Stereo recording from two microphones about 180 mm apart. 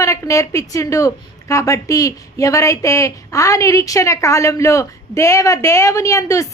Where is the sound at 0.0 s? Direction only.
15° left (ahead or behind).